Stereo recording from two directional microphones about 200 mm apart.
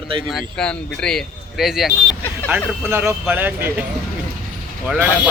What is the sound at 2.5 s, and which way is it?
Speech, 10° right (ahead or behind).